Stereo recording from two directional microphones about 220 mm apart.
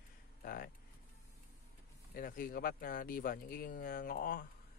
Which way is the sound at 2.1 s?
40° left (ahead or behind).